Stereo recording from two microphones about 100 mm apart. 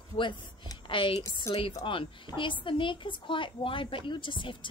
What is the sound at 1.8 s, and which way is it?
A woman's voice, 55° left (ahead or behind).